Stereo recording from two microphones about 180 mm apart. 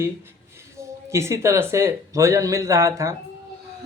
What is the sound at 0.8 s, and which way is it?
Speech, 15° right (ahead or behind).